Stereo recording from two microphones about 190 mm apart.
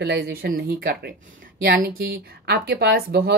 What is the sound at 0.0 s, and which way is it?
Speech, 60° right (ahead or behind).